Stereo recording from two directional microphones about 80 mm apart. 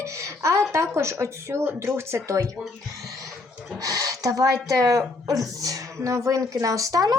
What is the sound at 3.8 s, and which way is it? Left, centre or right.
Speech, right.